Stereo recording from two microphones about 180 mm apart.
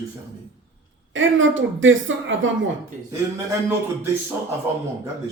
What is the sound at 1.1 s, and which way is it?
Speech, 90° right.